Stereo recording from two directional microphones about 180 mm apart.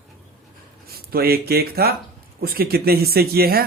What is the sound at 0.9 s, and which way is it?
Speech, 60° right (ahead or behind).